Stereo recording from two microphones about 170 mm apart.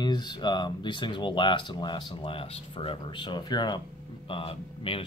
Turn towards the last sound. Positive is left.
turn(degrees=35)  # may be behind; listen again after turning